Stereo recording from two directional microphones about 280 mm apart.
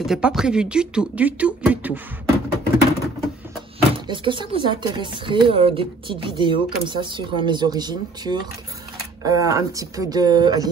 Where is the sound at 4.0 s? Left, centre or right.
Centre.